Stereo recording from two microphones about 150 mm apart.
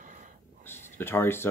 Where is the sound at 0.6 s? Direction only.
15° left (ahead or behind).